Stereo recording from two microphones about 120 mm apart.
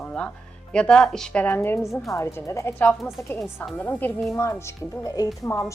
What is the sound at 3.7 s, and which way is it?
A woman's voice, 15° left (ahead or behind).